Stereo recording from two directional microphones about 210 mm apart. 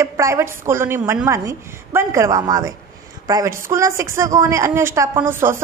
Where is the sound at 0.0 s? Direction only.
15° right (ahead or behind).